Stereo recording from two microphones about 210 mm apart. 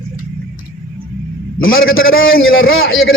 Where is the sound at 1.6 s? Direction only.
70° left (ahead or behind).